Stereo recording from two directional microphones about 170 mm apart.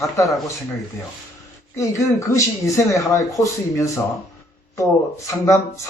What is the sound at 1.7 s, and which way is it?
A man's voice, 15° left (ahead or behind).